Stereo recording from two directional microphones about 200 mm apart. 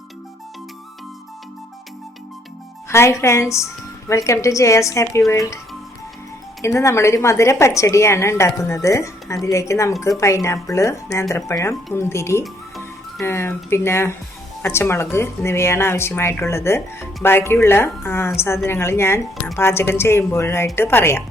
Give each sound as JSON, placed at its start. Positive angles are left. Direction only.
{"t": 2.9, "sound": "a woman's voice", "side_deg": 15}
{"t": 6.6, "sound": "a woman's voice", "side_deg": 15}